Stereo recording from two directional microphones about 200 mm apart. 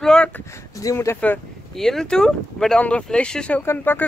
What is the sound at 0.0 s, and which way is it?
Speech, 5° left (ahead or behind).